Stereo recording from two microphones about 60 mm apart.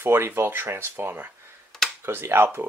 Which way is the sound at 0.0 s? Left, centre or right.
Right.